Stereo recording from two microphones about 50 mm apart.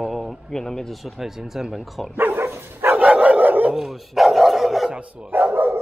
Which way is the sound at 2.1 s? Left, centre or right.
Right.